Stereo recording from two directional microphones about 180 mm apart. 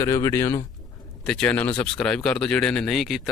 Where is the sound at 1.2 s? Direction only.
5° left (ahead or behind).